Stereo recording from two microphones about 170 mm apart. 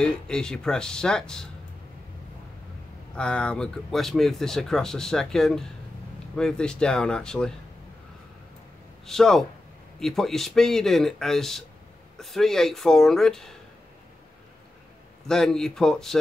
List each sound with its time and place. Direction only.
0.0 s speech: 5° left (ahead or behind)
3.2 s speech: 5° left (ahead or behind)
9.0 s speech: centre (ahead or behind)
15.2 s speech: 5° left (ahead or behind)